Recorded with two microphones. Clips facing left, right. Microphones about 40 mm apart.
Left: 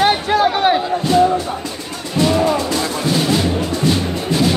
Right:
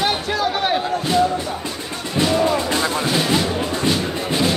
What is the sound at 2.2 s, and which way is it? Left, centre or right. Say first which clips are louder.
Music: left 3 dB; centre.